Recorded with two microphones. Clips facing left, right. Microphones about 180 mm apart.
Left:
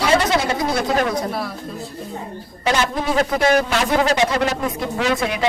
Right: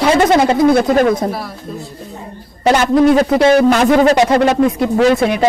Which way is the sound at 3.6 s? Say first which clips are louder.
Right 9 dB; 50° right (ahead or behind).